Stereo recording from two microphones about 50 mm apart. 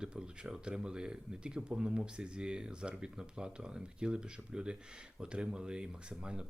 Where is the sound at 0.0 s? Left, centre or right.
Centre.